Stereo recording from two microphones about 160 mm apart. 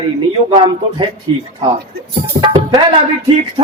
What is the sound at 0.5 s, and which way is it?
Speech, 30° right (ahead or behind).